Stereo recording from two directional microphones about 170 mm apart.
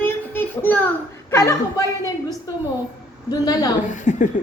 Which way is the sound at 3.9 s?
45° left (ahead or behind).